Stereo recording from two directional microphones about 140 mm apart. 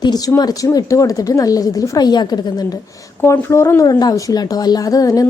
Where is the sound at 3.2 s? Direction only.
15° left (ahead or behind).